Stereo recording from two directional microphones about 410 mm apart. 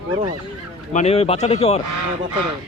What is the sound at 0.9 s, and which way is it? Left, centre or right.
Speech, centre.